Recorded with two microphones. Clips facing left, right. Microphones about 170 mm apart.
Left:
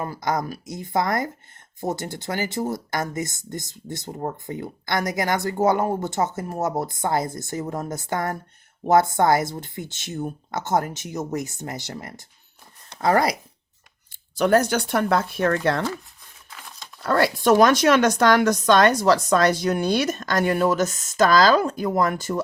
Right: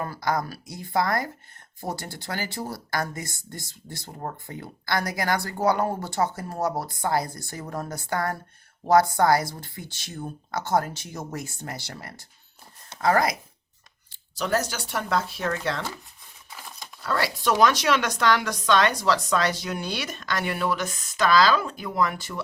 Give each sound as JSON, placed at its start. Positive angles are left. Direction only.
{"t": 0.0, "sound": "speech", "side_deg": 20}
{"t": 14.1, "sound": "speech", "side_deg": 55}
{"t": 17.0, "sound": "speech", "side_deg": 50}